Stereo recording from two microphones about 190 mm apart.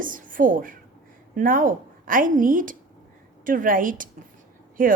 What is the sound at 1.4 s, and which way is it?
Speech, 45° right (ahead or behind).